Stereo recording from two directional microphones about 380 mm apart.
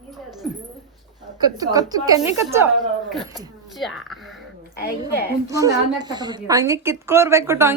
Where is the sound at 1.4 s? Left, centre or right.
Centre.